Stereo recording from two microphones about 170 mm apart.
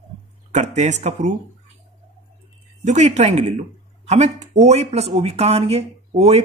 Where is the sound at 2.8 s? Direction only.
40° right (ahead or behind).